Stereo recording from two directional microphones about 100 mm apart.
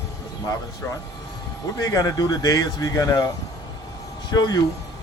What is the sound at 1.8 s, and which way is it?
Speech, 35° left (ahead or behind).